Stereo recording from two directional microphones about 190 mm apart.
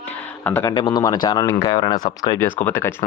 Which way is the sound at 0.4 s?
10° left (ahead or behind).